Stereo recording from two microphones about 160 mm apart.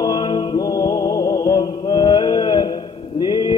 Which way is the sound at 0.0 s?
25° left (ahead or behind).